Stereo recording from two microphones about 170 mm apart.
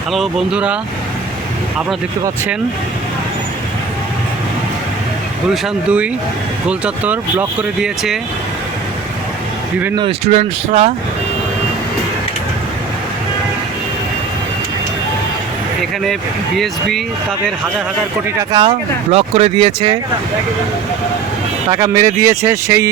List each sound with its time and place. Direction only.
0.1 s speech: centre (ahead or behind)
5.6 s speech: 5° right (ahead or behind)
9.9 s speech: 25° right (ahead or behind)
10.3 s speech: 40° right (ahead or behind)
18.3 s speech: 25° right (ahead or behind)
21.7 s speech: 20° right (ahead or behind)